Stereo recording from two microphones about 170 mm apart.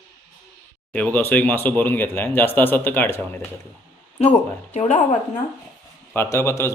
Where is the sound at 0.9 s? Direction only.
10° left (ahead or behind).